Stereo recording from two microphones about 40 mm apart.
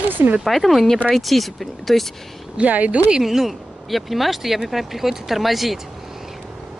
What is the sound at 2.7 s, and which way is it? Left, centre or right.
Speech, right.